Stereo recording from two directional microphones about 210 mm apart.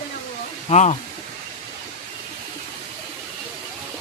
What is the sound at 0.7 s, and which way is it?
Speech, 30° left (ahead or behind).